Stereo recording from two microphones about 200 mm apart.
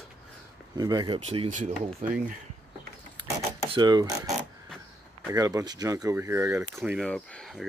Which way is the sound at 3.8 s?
20° right (ahead or behind).